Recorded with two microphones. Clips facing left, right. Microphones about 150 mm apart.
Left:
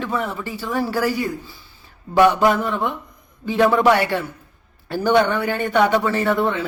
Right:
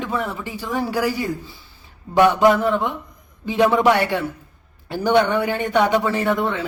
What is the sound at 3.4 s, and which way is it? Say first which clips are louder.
A man's voice: even; 15° right (ahead or behind).